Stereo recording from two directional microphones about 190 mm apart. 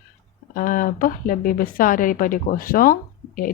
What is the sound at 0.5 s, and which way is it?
A woman's voice, 45° left (ahead or behind).